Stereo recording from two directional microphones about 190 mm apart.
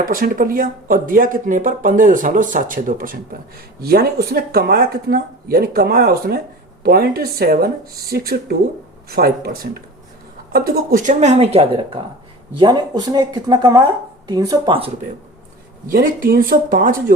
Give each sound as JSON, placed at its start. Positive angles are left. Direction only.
{"t": 0.0, "sound": "speech", "side_deg": -50}
{"t": 15.9, "sound": "speech", "side_deg": -45}